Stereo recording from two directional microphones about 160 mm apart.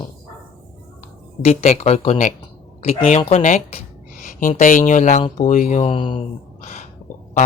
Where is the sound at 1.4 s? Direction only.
40° left (ahead or behind).